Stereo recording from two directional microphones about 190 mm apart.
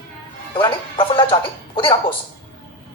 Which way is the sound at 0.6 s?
25° left (ahead or behind).